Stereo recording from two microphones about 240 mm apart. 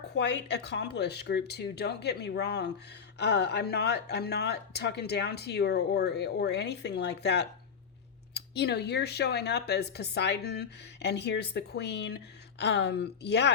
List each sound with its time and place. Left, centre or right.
0.1 s speech: left